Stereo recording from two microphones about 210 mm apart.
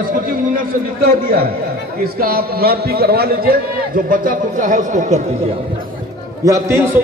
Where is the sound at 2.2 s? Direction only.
45° right (ahead or behind).